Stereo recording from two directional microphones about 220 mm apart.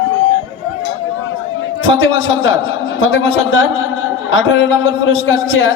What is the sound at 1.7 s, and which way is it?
A man's voice, 70° left (ahead or behind).